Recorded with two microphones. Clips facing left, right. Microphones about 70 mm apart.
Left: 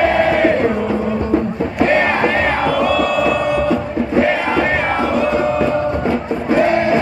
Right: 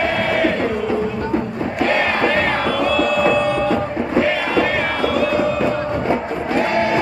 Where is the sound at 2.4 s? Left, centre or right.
Centre.